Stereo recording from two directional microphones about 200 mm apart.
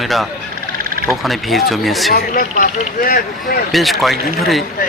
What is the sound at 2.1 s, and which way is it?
Speech, 45° left (ahead or behind).